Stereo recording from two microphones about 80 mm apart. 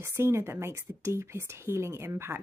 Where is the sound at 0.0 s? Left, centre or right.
Right.